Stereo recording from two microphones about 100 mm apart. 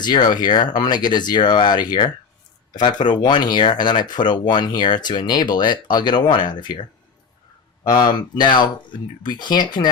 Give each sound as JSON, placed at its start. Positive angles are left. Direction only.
{"t": 0.0, "sound": "speech", "side_deg": 45}
{"t": 7.9, "sound": "speech", "side_deg": 50}